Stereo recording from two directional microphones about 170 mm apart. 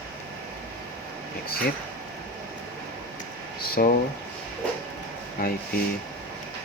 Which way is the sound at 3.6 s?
60° left (ahead or behind).